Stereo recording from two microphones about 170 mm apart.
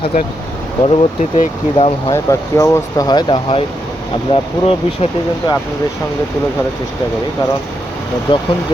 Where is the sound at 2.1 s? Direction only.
15° left (ahead or behind).